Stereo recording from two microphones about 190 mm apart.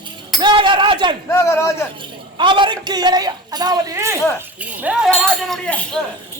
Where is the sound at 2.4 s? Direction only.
25° right (ahead or behind).